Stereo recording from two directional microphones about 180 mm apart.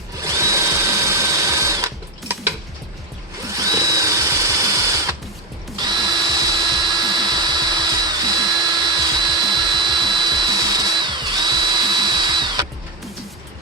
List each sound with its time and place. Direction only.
0.2 s drill: 15° right (ahead or behind)
5.7 s drill: 25° right (ahead or behind)